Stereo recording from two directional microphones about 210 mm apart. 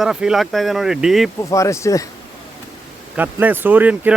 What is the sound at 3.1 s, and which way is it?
Speech, 10° right (ahead or behind).